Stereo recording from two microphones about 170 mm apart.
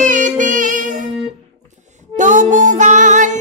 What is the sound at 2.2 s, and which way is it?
Music, 50° right (ahead or behind).